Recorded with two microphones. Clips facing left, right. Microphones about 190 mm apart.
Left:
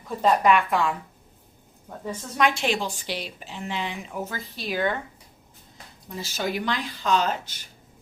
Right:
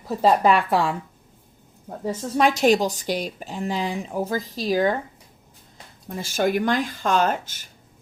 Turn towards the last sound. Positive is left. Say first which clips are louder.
# right 4 dB
turn(degrees=-45)  # may be behind; listen again after turning